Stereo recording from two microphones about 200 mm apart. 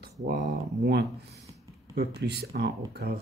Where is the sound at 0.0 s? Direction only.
50° right (ahead or behind).